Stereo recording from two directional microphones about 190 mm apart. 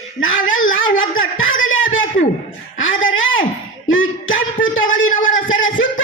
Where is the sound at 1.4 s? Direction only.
90° left.